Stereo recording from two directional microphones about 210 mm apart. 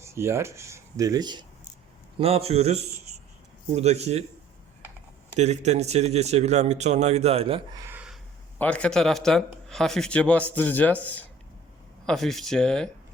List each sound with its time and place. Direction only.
0.0 s a man's voice: 10° right (ahead or behind); by 4.2 s 30° right (ahead or behind)
5.3 s a man's voice: 30° right (ahead or behind)
7.8 s a sound: 10° right (ahead or behind)
8.5 s speech: 5° left (ahead or behind)